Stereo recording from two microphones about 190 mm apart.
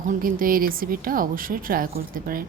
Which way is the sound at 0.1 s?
45° right (ahead or behind).